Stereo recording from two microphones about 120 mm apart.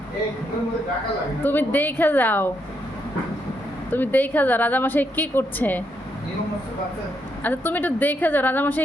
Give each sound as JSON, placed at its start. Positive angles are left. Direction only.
{"t": 1.5, "sound": "a woman's voice", "side_deg": 15}
{"t": 3.9, "sound": "a woman's voice", "side_deg": 15}
{"t": 7.4, "sound": "a woman's voice", "side_deg": 15}